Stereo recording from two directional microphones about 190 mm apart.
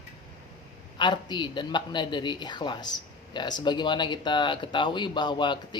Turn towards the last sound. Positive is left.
turn(degrees=25)  # may be behind; listen again after turning